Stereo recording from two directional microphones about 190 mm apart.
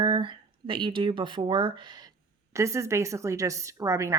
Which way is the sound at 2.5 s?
15° right (ahead or behind).